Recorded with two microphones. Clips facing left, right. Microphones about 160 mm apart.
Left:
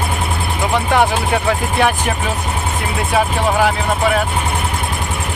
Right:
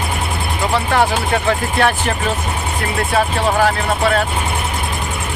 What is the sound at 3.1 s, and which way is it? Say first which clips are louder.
Speech: left 1 dB; 10° left (ahead or behind).